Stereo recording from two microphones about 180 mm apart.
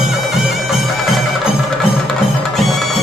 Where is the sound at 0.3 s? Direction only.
Centre (ahead or behind).